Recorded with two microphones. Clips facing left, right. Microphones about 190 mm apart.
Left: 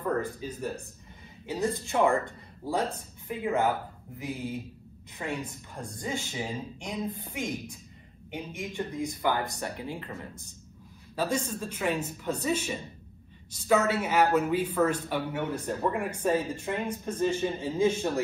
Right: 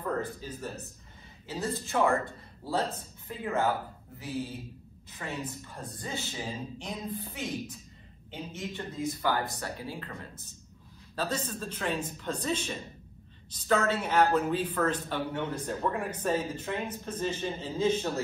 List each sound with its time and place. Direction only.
0.2 s a man's voice: 15° left (ahead or behind)
11.1 s a man's voice: 10° left (ahead or behind)